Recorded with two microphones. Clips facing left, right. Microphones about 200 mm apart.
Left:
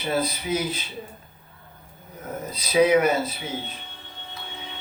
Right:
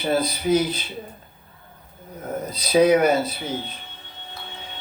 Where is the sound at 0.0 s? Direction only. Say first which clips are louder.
Right 4 dB; 35° right (ahead or behind).